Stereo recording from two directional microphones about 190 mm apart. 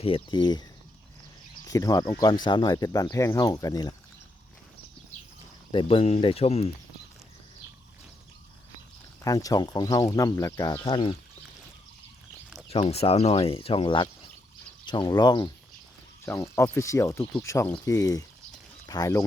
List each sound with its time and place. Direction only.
0.0 s speech: 25° left (ahead or behind)
1.6 s speech: 20° left (ahead or behind)
5.7 s speech: 30° left (ahead or behind)
9.2 s speech: 20° left (ahead or behind)
12.6 s speech: 30° left (ahead or behind)